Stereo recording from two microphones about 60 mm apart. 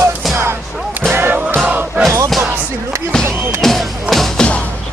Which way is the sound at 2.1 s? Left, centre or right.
Right.